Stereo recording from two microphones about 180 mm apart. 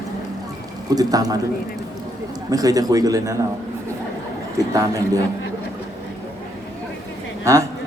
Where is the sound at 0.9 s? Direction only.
20° right (ahead or behind).